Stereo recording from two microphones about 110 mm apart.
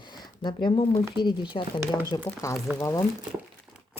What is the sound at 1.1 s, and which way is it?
A woman's voice, 45° left (ahead or behind).